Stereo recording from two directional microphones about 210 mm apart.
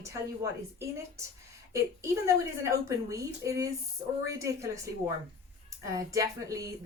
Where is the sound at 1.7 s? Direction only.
15° right (ahead or behind).